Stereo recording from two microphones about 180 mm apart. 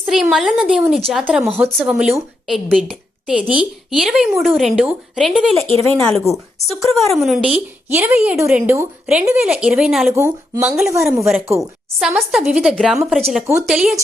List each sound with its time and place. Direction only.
0.0 s a woman's voice: 5° right (ahead or behind)
5.6 s speech: 30° right (ahead or behind)
6.0 s a woman's voice: 5° left (ahead or behind)
10.2 s speech: 15° right (ahead or behind)
10.6 s a woman's voice: centre (ahead or behind)